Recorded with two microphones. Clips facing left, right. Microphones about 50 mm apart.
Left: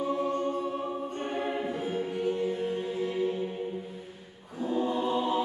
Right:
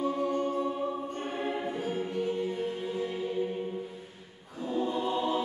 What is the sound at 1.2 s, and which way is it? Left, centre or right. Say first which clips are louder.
Music: left 2 dB; centre.